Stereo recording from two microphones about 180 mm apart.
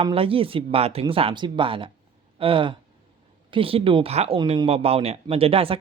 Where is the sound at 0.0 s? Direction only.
30° right (ahead or behind).